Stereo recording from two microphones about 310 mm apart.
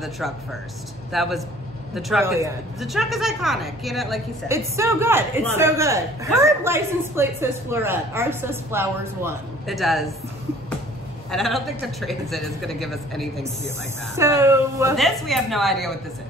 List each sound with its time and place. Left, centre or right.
0.0 s a woman's voice: centre
11.2 s a woman's voice: centre